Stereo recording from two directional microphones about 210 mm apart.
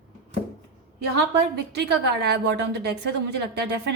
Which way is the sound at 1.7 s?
55° right (ahead or behind).